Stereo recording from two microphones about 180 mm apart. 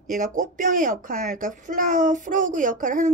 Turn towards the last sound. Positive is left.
turn(degrees=-45)  # may be behind; listen again after turning